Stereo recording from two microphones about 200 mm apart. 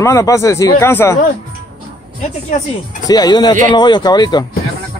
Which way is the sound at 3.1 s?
20° left (ahead or behind).